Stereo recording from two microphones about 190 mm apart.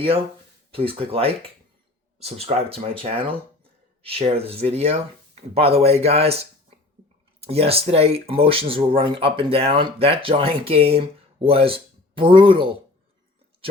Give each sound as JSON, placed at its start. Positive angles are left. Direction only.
{"t": 0.7, "sound": "speech", "side_deg": -30}